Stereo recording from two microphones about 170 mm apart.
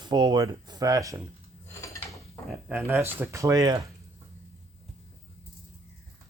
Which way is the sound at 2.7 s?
15° right (ahead or behind).